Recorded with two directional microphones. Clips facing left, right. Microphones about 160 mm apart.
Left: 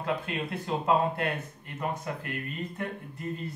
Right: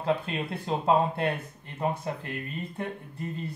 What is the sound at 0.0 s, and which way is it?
Speech, 30° right (ahead or behind).